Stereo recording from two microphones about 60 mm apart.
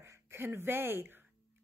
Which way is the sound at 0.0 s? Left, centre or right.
Right.